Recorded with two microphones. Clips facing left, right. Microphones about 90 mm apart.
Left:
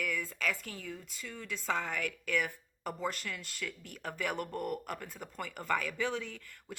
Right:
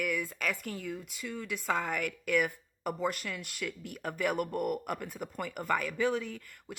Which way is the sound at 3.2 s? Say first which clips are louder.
Right 3 dB; 55° right (ahead or behind).